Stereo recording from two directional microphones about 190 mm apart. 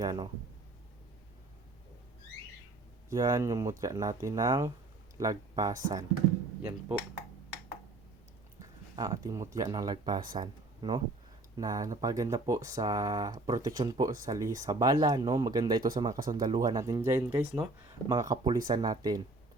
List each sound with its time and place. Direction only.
0.0 s speech: 20° right (ahead or behind)
3.1 s speech: 20° right (ahead or behind)
9.0 s speech: 20° right (ahead or behind)